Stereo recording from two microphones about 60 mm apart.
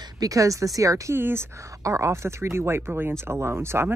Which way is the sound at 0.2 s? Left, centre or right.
Right.